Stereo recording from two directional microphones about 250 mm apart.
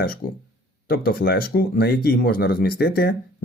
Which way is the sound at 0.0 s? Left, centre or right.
Left.